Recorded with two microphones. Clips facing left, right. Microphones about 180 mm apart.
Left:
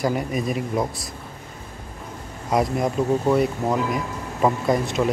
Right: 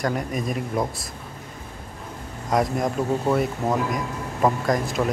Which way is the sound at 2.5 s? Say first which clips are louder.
Left 1 dB; centre (ahead or behind).